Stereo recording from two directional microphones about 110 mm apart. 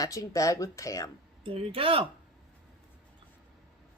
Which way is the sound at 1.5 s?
55° right (ahead or behind).